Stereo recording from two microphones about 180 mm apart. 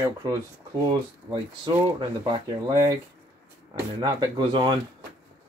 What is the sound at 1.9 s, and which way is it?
Speech, 25° right (ahead or behind).